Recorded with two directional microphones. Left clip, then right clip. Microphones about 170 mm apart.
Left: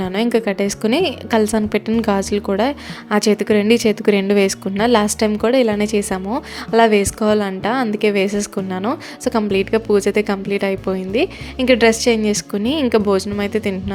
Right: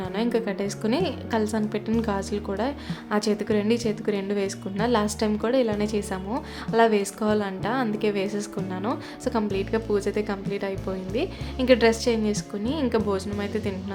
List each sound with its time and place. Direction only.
0.0 s a woman's voice: 40° left (ahead or behind)